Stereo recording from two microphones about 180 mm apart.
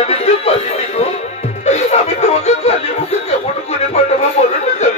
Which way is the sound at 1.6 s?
40° left (ahead or behind).